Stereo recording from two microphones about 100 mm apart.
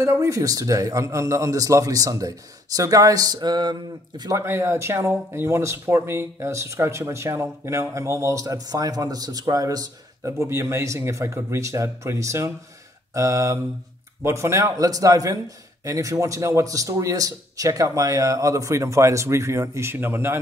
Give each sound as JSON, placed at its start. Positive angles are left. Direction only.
{"t": 0.0, "sound": "a man's voice", "side_deg": -30}
{"t": 4.4, "sound": "a man's voice", "side_deg": -25}